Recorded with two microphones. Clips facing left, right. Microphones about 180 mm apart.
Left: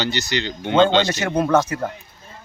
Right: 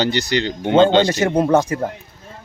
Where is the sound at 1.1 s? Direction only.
30° right (ahead or behind).